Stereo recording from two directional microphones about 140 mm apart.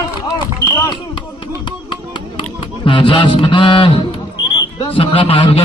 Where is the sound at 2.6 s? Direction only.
35° left (ahead or behind).